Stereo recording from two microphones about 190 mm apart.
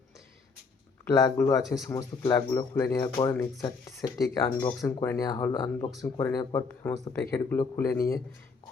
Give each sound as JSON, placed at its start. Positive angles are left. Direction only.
{"t": 1.0, "sound": "speech", "side_deg": 15}